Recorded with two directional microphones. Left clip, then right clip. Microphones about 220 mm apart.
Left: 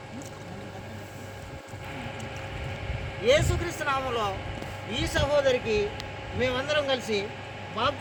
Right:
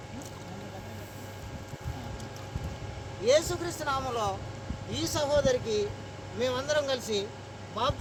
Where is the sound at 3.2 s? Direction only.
Centre (ahead or behind).